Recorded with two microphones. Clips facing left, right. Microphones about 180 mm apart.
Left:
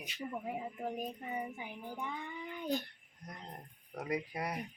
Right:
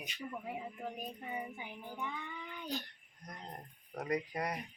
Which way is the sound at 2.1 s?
50° left (ahead or behind).